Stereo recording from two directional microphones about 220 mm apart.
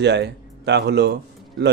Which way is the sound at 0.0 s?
50° right (ahead or behind).